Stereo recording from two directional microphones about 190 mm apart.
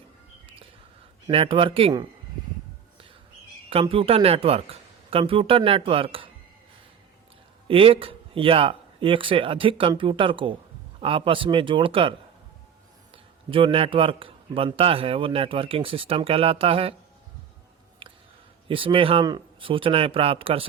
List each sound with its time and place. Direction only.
1.3 s a man's voice: 30° right (ahead or behind)
3.7 s a man's voice: 30° right (ahead or behind)
7.7 s a man's voice: 30° right (ahead or behind)
13.5 s a man's voice: 30° right (ahead or behind)
18.0 s a sound: 25° right (ahead or behind)
18.7 s a man's voice: 25° right (ahead or behind)